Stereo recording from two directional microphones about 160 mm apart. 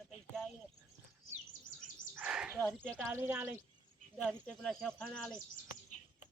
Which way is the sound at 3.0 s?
15° right (ahead or behind).